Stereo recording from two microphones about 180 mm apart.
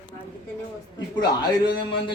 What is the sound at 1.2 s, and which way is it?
Speech, 25° left (ahead or behind).